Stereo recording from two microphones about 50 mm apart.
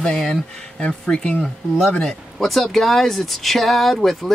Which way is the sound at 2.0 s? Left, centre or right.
Centre.